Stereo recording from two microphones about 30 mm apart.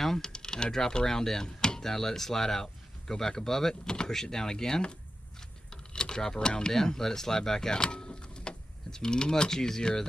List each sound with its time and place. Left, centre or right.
0.2 s speech: left
1.4 s a sound: left
1.8 s speech: centre
5.7 s mechanisms: left
6.7 s speech: centre